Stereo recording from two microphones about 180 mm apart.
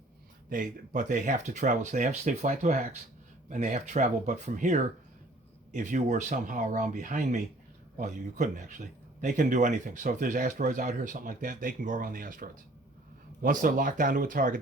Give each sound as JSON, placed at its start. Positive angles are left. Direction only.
{"t": 0.5, "sound": "speech", "side_deg": -45}